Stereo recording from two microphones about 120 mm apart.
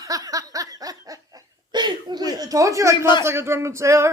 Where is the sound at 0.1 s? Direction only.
30° right (ahead or behind).